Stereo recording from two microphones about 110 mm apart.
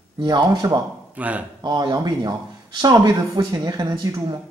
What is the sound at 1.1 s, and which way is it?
Speech, 15° right (ahead or behind).